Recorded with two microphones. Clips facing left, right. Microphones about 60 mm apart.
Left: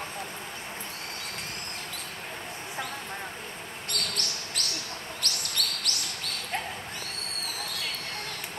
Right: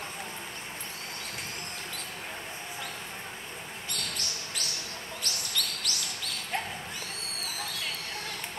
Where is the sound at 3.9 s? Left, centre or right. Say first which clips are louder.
Left 4 dB; left.